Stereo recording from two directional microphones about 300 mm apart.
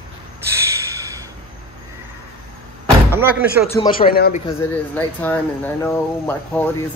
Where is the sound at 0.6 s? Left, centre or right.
Centre.